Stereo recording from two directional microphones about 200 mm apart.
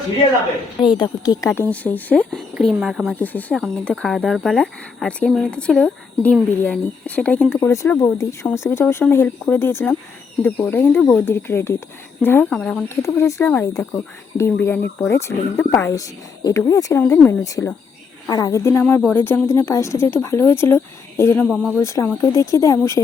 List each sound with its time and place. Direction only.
0.9 s a woman's voice: 20° left (ahead or behind)
1.7 s speech: 10° left (ahead or behind)
3.2 s a woman's voice: 10° left (ahead or behind)
21.4 s speech: centre (ahead or behind)
21.8 s a woman's voice: 15° left (ahead or behind)